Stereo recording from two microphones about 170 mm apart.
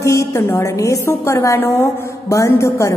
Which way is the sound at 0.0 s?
20° left (ahead or behind).